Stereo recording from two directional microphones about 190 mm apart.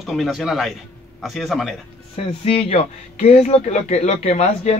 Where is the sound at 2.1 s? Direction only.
30° left (ahead or behind).